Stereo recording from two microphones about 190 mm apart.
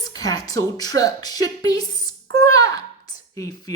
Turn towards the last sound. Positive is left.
turn(degrees=20)  # may be behind; listen again after turning